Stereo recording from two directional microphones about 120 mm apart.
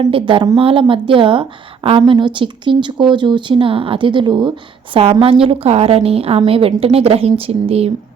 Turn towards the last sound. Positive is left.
turn(degrees=-55)  # may be behind; listen again after turning